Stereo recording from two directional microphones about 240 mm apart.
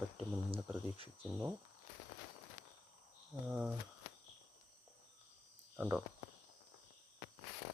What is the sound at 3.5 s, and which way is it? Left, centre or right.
Speech, centre.